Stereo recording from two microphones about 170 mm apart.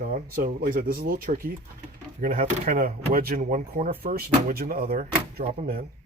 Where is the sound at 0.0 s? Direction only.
50° right (ahead or behind).